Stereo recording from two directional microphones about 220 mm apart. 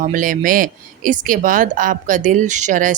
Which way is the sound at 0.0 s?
35° right (ahead or behind).